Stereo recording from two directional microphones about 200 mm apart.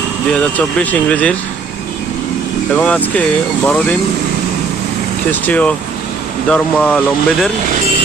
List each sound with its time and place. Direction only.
0.3 s speech: 5° left (ahead or behind)
2.7 s speech: 5° left (ahead or behind)
5.3 s speech: 5° left (ahead or behind)